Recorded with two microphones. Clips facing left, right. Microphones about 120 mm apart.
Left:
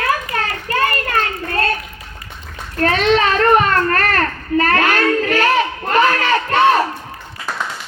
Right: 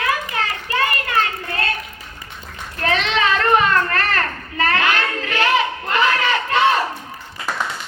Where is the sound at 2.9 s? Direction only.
45° left (ahead or behind).